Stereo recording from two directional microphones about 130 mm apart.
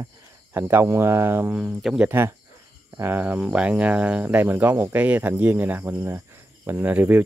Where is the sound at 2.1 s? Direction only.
15° right (ahead or behind).